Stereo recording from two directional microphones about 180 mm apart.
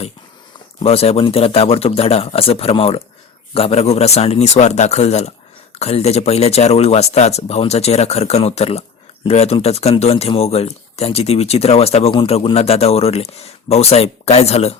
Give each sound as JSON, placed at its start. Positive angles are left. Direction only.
{"t": 0.8, "sound": "speech", "side_deg": 35}